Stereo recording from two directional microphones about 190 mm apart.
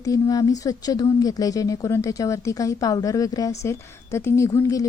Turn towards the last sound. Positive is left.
turn(degrees=15)  # may be behind; listen again after turning